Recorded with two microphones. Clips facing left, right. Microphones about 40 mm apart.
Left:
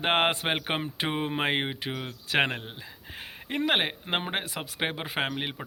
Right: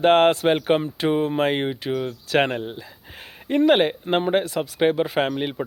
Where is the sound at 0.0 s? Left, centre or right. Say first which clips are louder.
Right 9 dB; centre.